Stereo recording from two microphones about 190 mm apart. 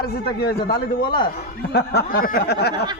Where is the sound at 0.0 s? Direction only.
55° left (ahead or behind).